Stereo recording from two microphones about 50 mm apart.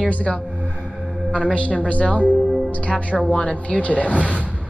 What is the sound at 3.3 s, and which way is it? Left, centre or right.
Speech, centre.